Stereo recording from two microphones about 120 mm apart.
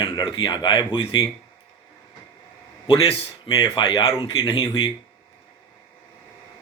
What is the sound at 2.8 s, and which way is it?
Speech, 50° left (ahead or behind).